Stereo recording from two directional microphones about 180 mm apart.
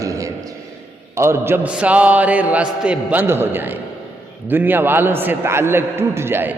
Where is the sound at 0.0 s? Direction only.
20° right (ahead or behind).